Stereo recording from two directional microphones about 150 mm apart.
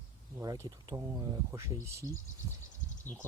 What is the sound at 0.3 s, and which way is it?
Speech, 20° right (ahead or behind).